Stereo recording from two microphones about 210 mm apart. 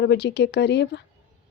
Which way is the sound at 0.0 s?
55° left (ahead or behind).